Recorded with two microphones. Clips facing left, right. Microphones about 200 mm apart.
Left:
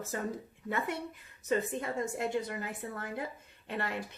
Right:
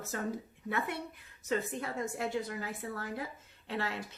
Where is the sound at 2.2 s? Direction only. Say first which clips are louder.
Left 2 dB; 20° left (ahead or behind).